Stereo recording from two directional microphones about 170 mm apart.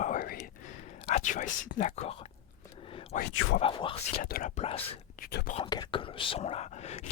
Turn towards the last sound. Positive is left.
turn(degrees=40)  # may be behind; listen again after turning